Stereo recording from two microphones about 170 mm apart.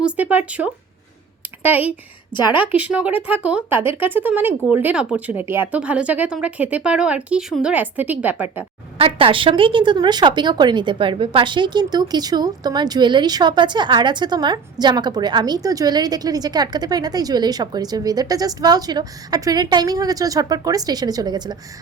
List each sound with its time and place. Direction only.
0.0 s speech: 10° right (ahead or behind)
9.0 s a woman's voice: 35° right (ahead or behind)